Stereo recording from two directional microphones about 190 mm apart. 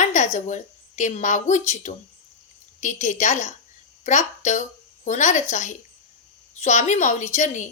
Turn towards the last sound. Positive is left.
turn(degrees=40)  # may be behind; listen again after turning